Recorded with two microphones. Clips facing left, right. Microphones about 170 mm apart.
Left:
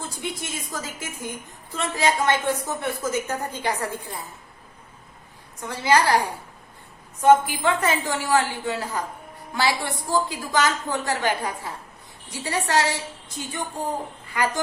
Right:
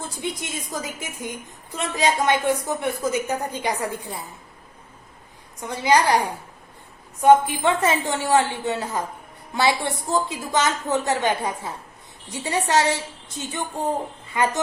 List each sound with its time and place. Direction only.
0.2 s a woman's voice: 20° right (ahead or behind)
5.5 s a woman's voice: 15° right (ahead or behind)
7.4 s a woman's voice: 25° right (ahead or behind)